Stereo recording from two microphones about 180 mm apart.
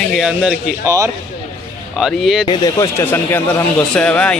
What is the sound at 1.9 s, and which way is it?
Speech, centre (ahead or behind).